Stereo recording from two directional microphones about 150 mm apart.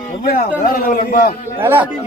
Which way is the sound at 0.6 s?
75° left (ahead or behind).